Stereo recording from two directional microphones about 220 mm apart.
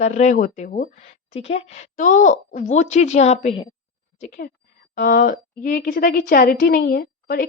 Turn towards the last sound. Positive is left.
turn(degrees=45)  # may be behind; listen again after turning